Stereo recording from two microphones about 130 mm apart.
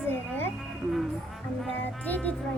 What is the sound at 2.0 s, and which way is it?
Speech, 10° left (ahead or behind).